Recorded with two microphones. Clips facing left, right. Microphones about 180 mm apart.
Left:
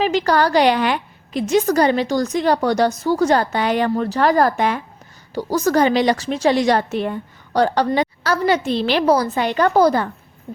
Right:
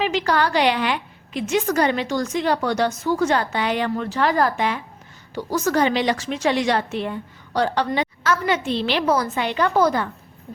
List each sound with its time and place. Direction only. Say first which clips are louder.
0.0 s a woman's voice: left 4 dB; 40° left (ahead or behind)